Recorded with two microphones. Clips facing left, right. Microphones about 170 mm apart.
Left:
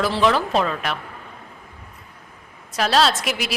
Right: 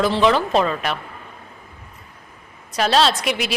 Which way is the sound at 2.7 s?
Centre (ahead or behind).